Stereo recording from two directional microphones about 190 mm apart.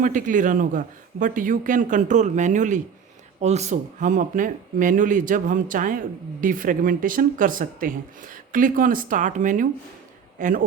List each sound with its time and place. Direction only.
0.0 s a man's voice: 45° right (ahead or behind)